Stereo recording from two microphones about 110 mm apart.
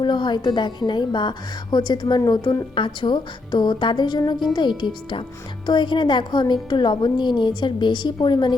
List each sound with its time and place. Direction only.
0.0 s a woman's voice: 45° left (ahead or behind)
5.6 s a woman's voice: 45° left (ahead or behind)